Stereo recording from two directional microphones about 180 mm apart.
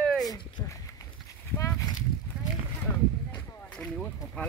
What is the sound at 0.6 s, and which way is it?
Speech, 20° left (ahead or behind).